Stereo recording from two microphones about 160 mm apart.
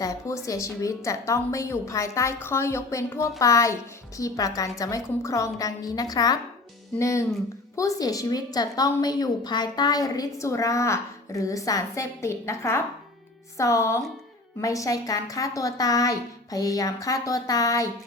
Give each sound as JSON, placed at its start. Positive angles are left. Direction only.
{"t": 0.0, "sound": "a woman's voice", "side_deg": 20}